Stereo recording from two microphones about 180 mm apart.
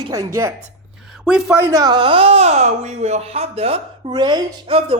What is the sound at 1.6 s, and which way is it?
Speech, 15° right (ahead or behind).